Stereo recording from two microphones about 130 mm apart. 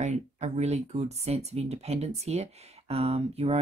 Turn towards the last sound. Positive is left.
turn(degrees=-50)  # may be behind; listen again after turning